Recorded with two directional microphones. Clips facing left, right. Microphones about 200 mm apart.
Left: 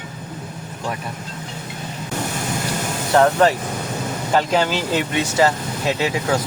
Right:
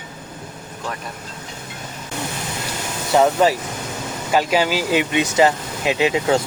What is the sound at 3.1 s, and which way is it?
Speech, 5° right (ahead or behind).